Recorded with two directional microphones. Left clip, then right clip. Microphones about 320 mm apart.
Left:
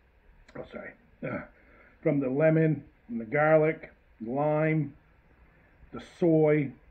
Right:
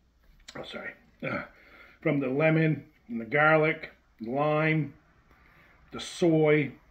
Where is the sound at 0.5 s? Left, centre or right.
Centre.